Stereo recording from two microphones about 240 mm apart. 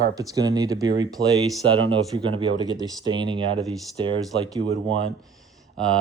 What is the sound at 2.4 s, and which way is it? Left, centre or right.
Speech, centre.